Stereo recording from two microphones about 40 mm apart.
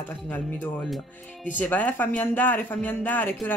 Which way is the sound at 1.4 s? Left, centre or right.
Left.